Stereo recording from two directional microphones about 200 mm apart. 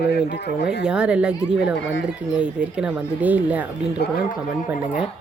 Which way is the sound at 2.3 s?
5° right (ahead or behind).